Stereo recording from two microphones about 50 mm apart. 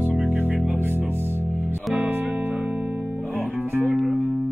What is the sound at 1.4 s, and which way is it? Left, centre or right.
Music, right.